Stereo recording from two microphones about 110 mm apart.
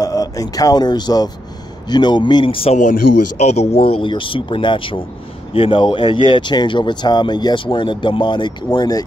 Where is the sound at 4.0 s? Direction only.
50° left (ahead or behind).